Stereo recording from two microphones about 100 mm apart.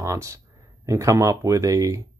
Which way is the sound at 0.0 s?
30° right (ahead or behind).